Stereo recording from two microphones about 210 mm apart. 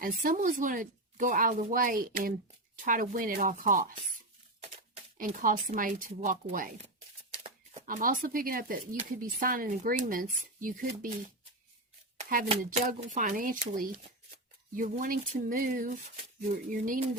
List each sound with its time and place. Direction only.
0.0 s speech: 40° right (ahead or behind)
5.1 s speech: 40° right (ahead or behind)
12.1 s a sound: 35° right (ahead or behind)
12.7 s speech: 35° right (ahead or behind)